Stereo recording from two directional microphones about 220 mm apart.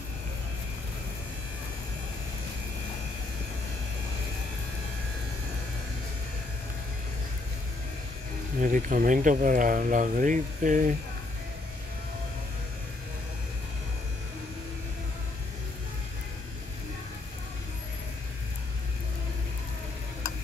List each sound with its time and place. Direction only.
8.5 s speech: 35° right (ahead or behind)